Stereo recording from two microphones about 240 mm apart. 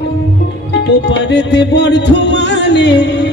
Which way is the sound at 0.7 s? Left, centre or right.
Left.